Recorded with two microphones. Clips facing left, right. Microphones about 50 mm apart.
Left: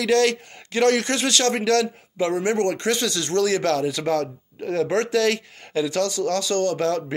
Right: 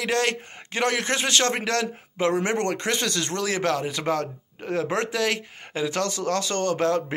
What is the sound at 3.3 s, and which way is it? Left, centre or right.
Speech, right.